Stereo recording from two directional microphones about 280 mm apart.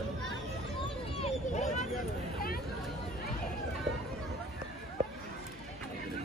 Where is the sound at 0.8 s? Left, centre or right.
Left.